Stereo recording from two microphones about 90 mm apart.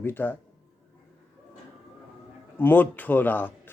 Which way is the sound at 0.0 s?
20° left (ahead or behind).